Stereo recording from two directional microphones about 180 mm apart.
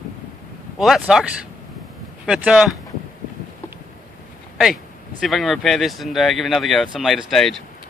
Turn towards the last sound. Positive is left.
turn(degrees=0)  # may be behind; listen again after turning